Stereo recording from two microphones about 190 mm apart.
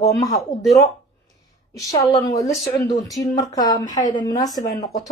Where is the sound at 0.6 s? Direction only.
20° left (ahead or behind).